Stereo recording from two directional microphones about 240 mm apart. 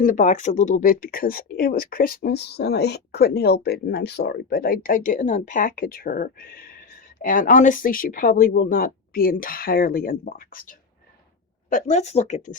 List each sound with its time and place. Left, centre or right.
0.0 s speech: left